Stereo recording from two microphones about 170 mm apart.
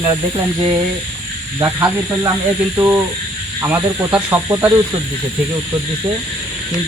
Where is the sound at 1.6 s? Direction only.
20° right (ahead or behind).